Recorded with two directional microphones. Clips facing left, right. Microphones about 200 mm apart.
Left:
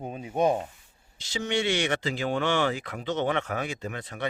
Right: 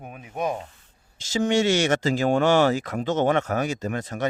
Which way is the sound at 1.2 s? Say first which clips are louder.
Right 7 dB; 45° right (ahead or behind).